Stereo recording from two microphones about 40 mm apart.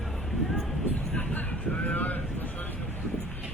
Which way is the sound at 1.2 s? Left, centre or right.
Left.